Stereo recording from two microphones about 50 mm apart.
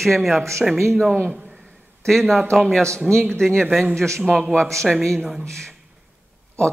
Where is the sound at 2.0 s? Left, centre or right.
Centre.